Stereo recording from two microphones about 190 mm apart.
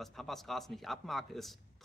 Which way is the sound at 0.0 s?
Centre (ahead or behind).